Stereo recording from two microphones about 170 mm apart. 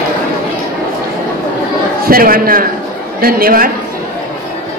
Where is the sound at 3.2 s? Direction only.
60° right (ahead or behind).